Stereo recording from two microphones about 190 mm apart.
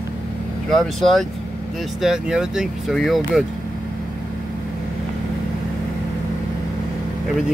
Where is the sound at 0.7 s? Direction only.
Centre (ahead or behind).